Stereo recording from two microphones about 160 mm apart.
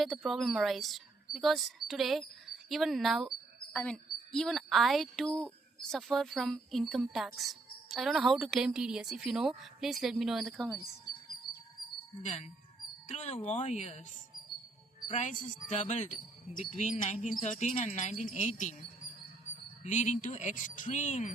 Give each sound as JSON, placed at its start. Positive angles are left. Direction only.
{"t": 0.0, "sound": "speech", "side_deg": 0}
{"t": 3.7, "sound": "speech", "side_deg": 10}
{"t": 12.2, "sound": "speech", "side_deg": 45}
{"t": 15.1, "sound": "speech", "side_deg": 50}
{"t": 19.8, "sound": "speech", "side_deg": 45}